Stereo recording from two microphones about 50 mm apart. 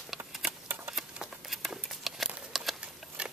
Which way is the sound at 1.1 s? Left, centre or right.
Centre.